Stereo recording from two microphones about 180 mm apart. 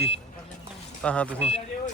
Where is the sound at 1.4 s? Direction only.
35° left (ahead or behind).